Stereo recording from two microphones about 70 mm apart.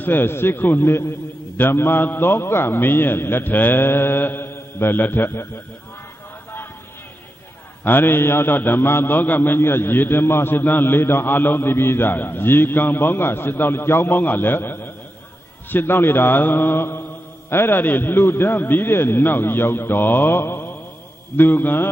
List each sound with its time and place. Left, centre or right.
0.0 s a man's voice: left
7.8 s a man's voice: left